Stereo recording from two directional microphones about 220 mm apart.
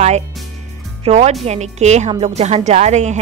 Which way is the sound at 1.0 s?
30° right (ahead or behind).